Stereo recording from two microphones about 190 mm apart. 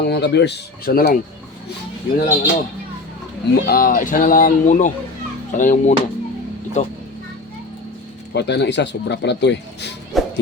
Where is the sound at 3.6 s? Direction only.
50° left (ahead or behind).